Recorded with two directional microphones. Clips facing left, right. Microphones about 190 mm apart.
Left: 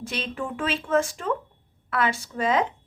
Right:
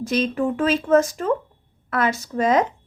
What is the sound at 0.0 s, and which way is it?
A woman's voice, 40° right (ahead or behind).